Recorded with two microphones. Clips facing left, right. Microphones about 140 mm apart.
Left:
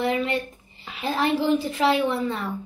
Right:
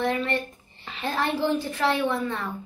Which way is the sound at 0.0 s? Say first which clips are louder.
Left 2 dB; 10° left (ahead or behind).